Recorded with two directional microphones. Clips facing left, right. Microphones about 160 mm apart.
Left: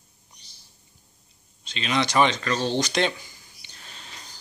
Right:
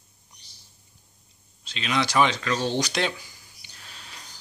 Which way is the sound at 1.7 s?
5° right (ahead or behind).